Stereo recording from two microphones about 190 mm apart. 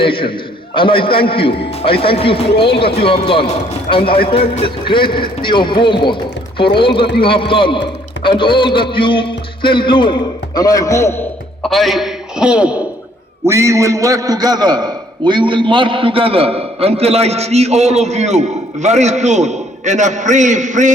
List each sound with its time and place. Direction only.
0.0 s a man's voice: 25° left (ahead or behind)
11.6 s a man's voice: centre (ahead or behind); by 20.9 s 40° right (ahead or behind)